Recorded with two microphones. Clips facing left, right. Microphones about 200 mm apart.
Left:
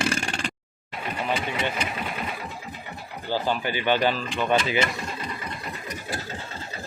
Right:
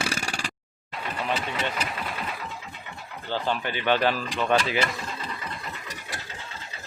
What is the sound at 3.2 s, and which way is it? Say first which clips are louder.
Speech: left 2 dB; 5° left (ahead or behind).